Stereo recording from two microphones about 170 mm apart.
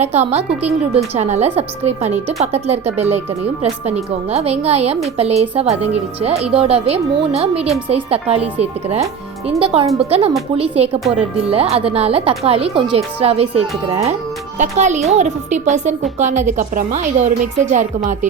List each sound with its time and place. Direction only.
0.0 s a woman's voice: 40° right (ahead or behind)